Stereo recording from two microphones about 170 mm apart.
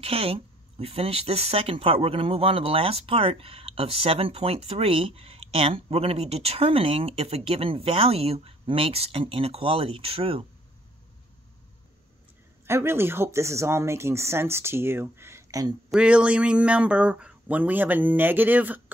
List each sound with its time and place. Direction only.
0.0 s speech: 35° right (ahead or behind)
12.6 s speech: 15° right (ahead or behind)
15.9 s speech: 5° right (ahead or behind)